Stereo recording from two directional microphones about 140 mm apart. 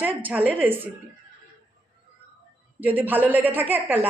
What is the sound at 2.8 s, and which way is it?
Speech, 15° right (ahead or behind).